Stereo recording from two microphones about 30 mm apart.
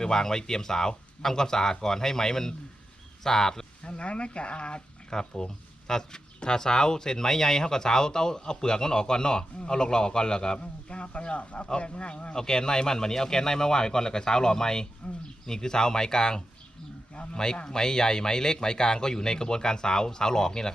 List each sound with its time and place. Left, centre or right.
0.0 s speech: centre
3.8 s speech: left
5.1 s speech: left
10.6 s speech: left
12.3 s speech: left